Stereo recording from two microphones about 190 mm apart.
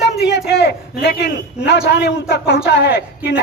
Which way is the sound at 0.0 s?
60° left (ahead or behind).